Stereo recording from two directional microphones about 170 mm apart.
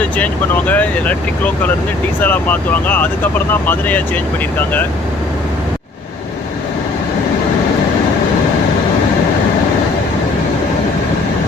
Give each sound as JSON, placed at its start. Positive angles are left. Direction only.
{"t": 0.7, "sound": "speech", "side_deg": 10}
{"t": 2.2, "sound": "speech", "side_deg": 10}